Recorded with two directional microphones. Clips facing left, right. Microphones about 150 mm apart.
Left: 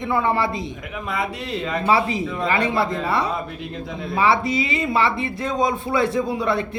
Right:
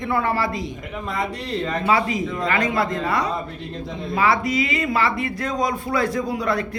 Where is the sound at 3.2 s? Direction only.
5° left (ahead or behind).